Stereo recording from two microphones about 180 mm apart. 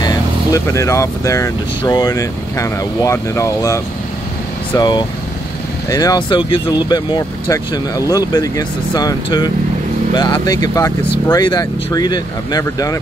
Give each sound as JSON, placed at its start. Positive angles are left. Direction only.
{"t": 0.0, "sound": "speech", "side_deg": 20}